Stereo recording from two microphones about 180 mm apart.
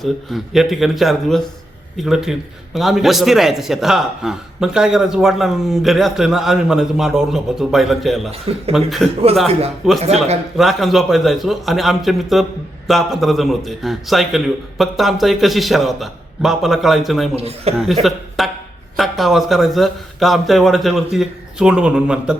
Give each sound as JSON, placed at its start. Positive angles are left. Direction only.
{"t": 0.0, "sound": "a man's voice", "side_deg": 0}
{"t": 8.3, "sound": "a man's voice", "side_deg": -35}
{"t": 8.7, "sound": "a man's voice", "side_deg": 0}
{"t": 9.5, "sound": "a man's voice", "side_deg": -35}
{"t": 10.6, "sound": "a man's voice", "side_deg": 0}
{"t": 17.3, "sound": "a man's voice", "side_deg": -35}
{"t": 18.0, "sound": "a man's voice", "side_deg": 0}